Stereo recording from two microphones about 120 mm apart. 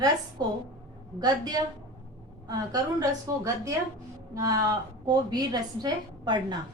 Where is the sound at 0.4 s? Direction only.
35° right (ahead or behind).